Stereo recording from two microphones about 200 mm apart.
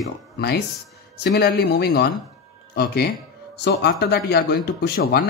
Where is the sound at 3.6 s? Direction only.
55° left (ahead or behind).